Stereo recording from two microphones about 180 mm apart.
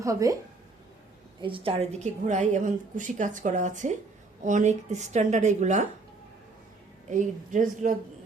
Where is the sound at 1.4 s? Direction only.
30° right (ahead or behind).